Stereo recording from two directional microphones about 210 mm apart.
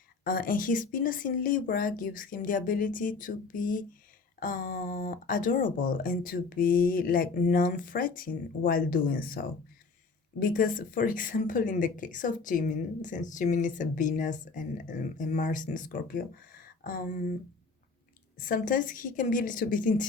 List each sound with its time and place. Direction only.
0.3 s a woman's voice: 40° left (ahead or behind)
10.4 s a woman's voice: 40° left (ahead or behind)
18.3 s a woman's voice: 40° left (ahead or behind)